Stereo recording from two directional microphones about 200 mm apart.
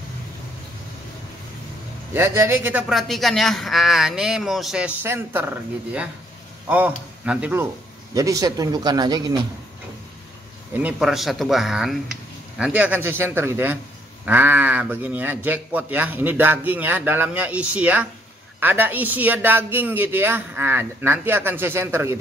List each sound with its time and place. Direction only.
2.1 s a man's voice: 10° right (ahead or behind)
7.2 s a man's voice: 5° right (ahead or behind)
10.8 s a man's voice: 5° right (ahead or behind)